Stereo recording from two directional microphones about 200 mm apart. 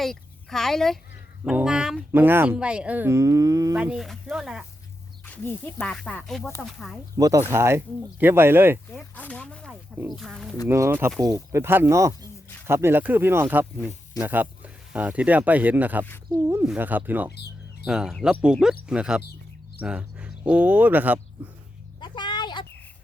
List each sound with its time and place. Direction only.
0.0 s a woman's voice: centre (ahead or behind); by 3.8 s 15° right (ahead or behind)
3.8 s speech: 5° right (ahead or behind)
5.2 s speech: 10° left (ahead or behind)
7.2 s speech: 15° right (ahead or behind)
8.9 s speech: 5° left (ahead or behind)
10.7 s speech: 10° right (ahead or behind)
17.3 s a sound: 55° left (ahead or behind)
17.8 s speech: 5° right (ahead or behind)
19.8 s a sound: 5° right (ahead or behind)
20.5 s speech: 5° right (ahead or behind)
22.0 s a sound: 20° left (ahead or behind)